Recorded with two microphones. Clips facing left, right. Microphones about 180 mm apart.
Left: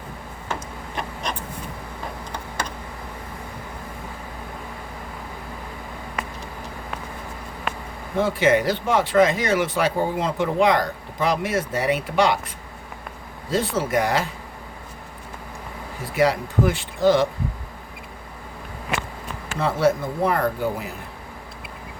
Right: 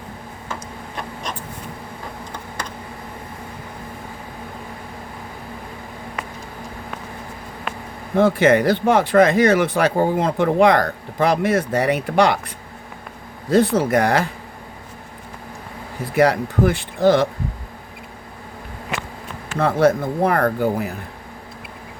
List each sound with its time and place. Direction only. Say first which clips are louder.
8.1 s speech: right 4 dB; 55° right (ahead or behind)
13.5 s speech: right 6 dB; 55° right (ahead or behind)
16.1 s speech: right 3 dB; 55° right (ahead or behind)
19.5 s speech: right 4 dB; 55° right (ahead or behind)